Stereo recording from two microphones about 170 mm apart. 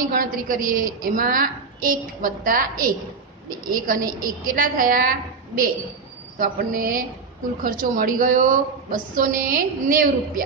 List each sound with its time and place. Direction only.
0.0 s a woman's voice: 55° right (ahead or behind)
6.3 s a woman's voice: 55° right (ahead or behind)